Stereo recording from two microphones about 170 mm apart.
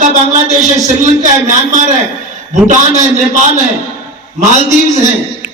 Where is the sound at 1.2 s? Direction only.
45° right (ahead or behind).